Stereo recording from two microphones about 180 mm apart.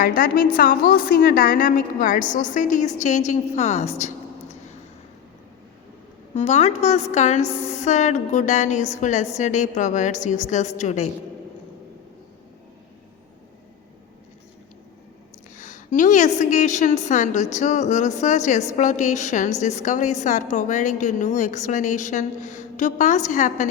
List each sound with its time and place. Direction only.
0.0 s a woman's voice: 50° left (ahead or behind)
6.3 s a woman's voice: 40° left (ahead or behind)
15.5 s a woman's voice: 45° left (ahead or behind)